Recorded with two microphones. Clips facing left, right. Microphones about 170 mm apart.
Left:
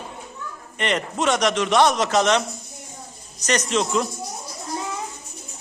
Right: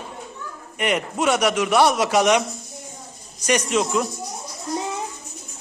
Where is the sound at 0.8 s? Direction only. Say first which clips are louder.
Right 1 dB; 10° right (ahead or behind).